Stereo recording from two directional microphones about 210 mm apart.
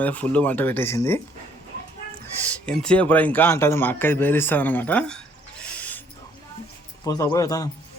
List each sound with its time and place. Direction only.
0.0 s a man's voice: 5° left (ahead or behind)
2.5 s a man's voice: 5° left (ahead or behind)
5.7 s owl: 5° left (ahead or behind)
7.0 s a man's voice: 20° left (ahead or behind)